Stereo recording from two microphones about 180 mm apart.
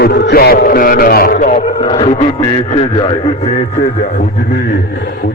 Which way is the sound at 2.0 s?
35° left (ahead or behind).